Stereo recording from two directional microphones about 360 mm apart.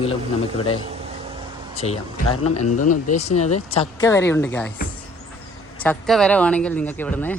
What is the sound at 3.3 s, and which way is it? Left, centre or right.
Speech, left.